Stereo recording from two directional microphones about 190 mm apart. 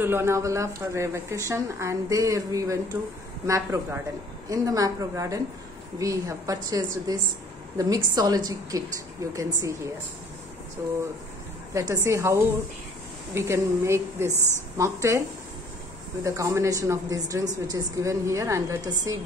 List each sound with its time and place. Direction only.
0.0 s a woman's voice: 10° right (ahead or behind)
11.7 s a woman's voice: 15° right (ahead or behind)
14.3 s a woman's voice: 15° left (ahead or behind)
14.8 s a woman's voice: 15° right (ahead or behind)
16.3 s a woman's voice: 15° right (ahead or behind)